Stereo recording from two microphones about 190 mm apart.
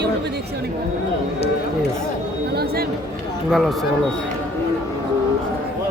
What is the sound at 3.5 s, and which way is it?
Speech, centre (ahead or behind).